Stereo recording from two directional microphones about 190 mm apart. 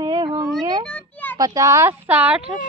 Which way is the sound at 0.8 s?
5° left (ahead or behind).